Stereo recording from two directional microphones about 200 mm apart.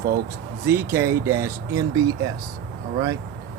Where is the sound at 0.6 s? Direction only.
10° right (ahead or behind).